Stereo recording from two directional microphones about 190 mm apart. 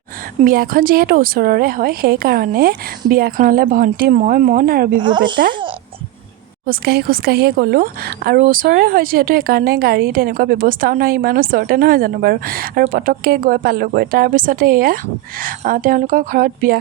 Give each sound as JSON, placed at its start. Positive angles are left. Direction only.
{"t": 0.4, "sound": "speech", "side_deg": -50}
{"t": 5.0, "sound": "speech", "side_deg": -25}
{"t": 6.7, "sound": "speech", "side_deg": -55}